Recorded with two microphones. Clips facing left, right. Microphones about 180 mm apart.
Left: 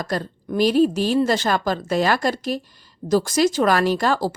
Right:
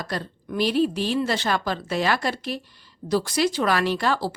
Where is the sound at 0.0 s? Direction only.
45° left (ahead or behind).